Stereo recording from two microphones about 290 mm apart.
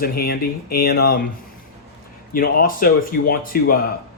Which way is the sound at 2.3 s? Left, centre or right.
Left.